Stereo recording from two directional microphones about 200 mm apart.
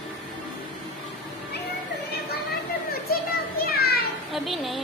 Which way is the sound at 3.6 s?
50° left (ahead or behind).